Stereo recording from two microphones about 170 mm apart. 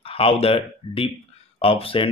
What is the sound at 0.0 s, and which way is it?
Speech, 35° left (ahead or behind).